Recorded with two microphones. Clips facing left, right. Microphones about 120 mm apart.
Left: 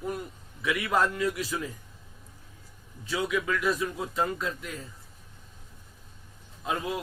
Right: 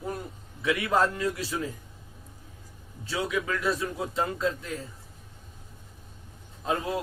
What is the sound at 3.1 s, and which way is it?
Speech, 30° right (ahead or behind).